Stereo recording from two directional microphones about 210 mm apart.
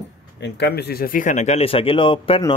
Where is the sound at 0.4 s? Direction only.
50° left (ahead or behind).